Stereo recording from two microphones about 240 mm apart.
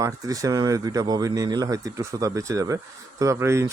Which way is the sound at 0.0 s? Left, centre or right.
Centre.